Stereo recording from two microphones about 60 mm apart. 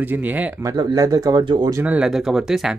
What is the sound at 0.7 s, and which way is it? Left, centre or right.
Speech, right.